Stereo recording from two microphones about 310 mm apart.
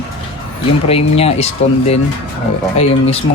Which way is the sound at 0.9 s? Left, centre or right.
Centre.